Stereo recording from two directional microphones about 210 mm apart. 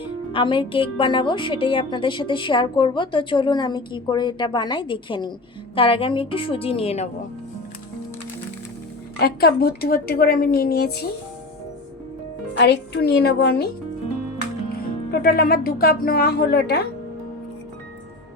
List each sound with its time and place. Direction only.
0.0 s speech: 25° left (ahead or behind)
9.1 s a woman's voice: 50° left (ahead or behind)
12.5 s a woman's voice: 55° left (ahead or behind)
14.7 s speech: 45° left (ahead or behind)